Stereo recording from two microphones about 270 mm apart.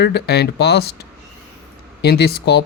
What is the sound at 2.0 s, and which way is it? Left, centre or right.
Speech, left.